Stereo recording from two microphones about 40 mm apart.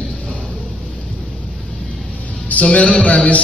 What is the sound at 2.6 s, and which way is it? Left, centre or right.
Speech, left.